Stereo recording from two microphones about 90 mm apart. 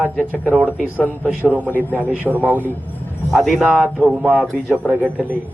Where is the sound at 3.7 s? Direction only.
15° right (ahead or behind).